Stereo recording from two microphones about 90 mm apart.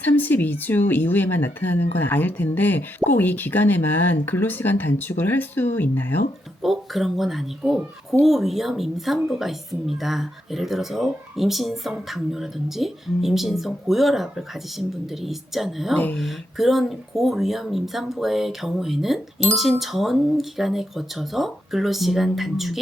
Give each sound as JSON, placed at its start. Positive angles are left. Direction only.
{"t": 0.0, "sound": "speech", "side_deg": 20}
{"t": 6.6, "sound": "a woman's voice", "side_deg": 0}